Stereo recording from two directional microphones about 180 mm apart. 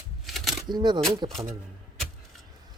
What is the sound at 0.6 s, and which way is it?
Speech, 25° right (ahead or behind).